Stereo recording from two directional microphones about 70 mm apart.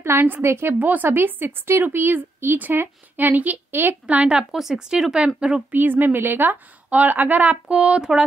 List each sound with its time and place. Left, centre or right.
0.0 s a woman's voice: right
0.7 s a woman's voice: right
4.2 s speech: centre
5.8 s a woman's voice: right; by 8.2 s centre